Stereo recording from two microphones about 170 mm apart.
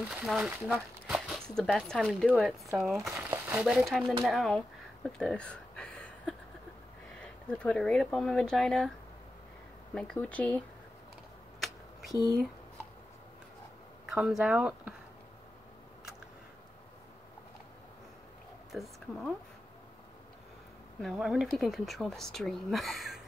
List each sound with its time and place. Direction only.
0.1 s speech: 5° right (ahead or behind)
5.1 s a sound: 5° left (ahead or behind)
7.2 s speech: 5° left (ahead or behind)
9.9 s speech: 5° left (ahead or behind)
12.1 s speech: 20° left (ahead or behind)
14.1 s speech: 5° right (ahead or behind)
18.7 s speech: centre (ahead or behind)
21.0 s speech: centre (ahead or behind)